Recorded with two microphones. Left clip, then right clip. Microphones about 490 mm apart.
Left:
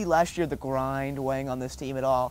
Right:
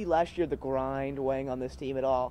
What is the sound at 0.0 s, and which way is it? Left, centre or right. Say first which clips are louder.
Speech: left 4 dB; left.